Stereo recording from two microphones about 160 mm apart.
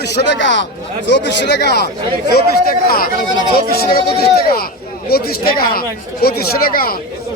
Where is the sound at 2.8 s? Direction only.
65° left (ahead or behind).